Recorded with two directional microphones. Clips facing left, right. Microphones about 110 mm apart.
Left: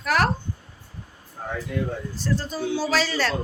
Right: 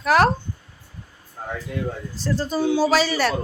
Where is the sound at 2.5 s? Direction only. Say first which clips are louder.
Right 8 dB; 15° right (ahead or behind).